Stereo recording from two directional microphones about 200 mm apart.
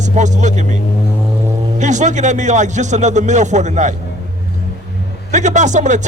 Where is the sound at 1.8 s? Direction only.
35° right (ahead or behind).